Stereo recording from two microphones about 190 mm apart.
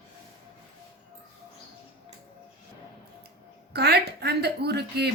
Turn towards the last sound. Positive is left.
turn(degrees=-60)  # may be behind; listen again after turning